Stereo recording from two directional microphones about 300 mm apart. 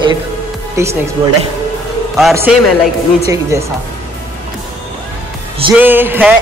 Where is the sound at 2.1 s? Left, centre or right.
Centre.